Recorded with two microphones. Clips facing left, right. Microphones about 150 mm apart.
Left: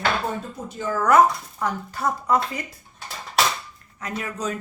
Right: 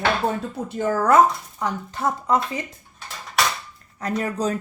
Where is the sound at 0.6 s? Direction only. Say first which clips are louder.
Right 4 dB; 50° right (ahead or behind).